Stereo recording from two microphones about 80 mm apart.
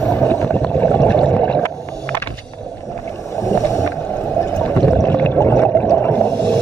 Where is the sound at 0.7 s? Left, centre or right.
Left.